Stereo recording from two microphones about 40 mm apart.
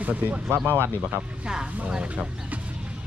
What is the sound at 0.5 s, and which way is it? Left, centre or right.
Speech, right.